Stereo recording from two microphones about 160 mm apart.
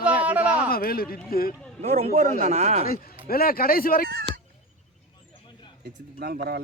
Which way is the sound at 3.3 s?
70° left (ahead or behind).